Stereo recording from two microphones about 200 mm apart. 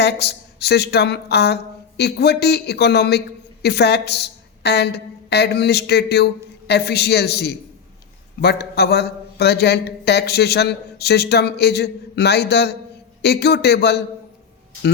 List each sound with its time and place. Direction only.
0.0 s speech: 55° left (ahead or behind)